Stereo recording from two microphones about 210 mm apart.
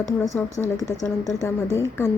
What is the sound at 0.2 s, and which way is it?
Speech, 10° left (ahead or behind).